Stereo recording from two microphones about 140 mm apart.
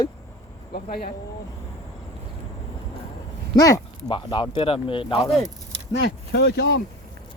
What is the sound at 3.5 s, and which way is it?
Speech, 25° left (ahead or behind).